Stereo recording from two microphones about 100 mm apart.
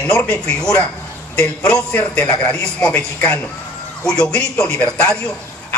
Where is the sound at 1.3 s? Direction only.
10° left (ahead or behind).